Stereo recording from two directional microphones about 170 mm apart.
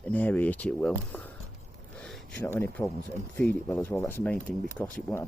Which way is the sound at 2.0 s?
5° left (ahead or behind).